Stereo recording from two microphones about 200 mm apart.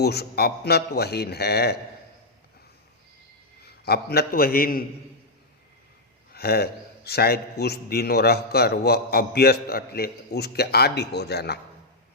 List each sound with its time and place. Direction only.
0.0 s a man's voice: 55° left (ahead or behind)
3.6 s a man's voice: 55° left (ahead or behind)
6.3 s a man's voice: 50° left (ahead or behind)